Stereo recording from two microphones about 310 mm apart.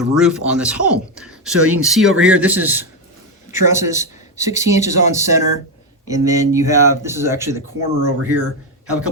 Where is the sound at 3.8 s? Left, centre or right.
Centre.